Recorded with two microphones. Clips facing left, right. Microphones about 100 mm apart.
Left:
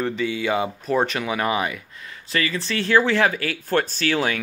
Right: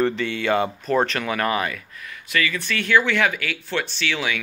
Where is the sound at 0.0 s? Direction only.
5° left (ahead or behind).